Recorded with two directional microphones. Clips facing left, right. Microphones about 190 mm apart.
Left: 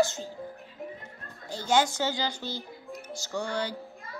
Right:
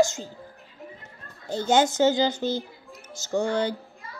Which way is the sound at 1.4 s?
20° right (ahead or behind).